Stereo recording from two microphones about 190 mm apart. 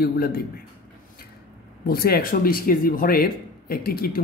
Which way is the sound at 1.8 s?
55° left (ahead or behind).